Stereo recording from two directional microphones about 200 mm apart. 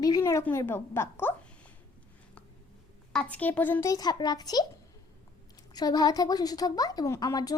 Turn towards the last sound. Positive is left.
turn(degrees=20)  # may be behind; listen again after turning